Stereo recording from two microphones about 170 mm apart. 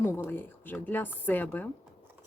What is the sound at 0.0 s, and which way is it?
Speech, 15° left (ahead or behind).